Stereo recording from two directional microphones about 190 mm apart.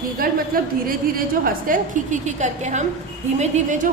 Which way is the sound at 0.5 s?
50° right (ahead or behind).